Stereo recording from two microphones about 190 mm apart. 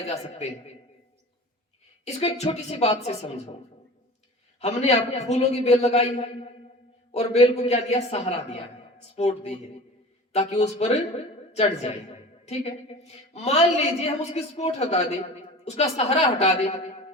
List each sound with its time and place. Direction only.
2.0 s a woman's voice: 35° left (ahead or behind)
4.6 s a woman's voice: 35° left (ahead or behind)